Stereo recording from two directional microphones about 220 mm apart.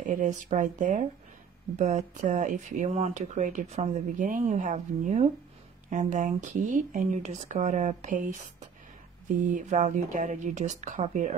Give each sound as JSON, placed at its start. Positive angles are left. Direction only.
{"t": 0.0, "sound": "speech", "side_deg": -35}